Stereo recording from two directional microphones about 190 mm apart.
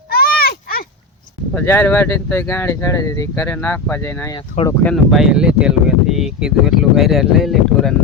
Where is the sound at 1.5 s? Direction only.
10° left (ahead or behind).